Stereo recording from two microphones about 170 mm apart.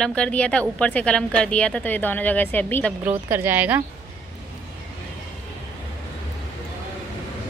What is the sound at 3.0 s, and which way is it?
Speech, 10° right (ahead or behind).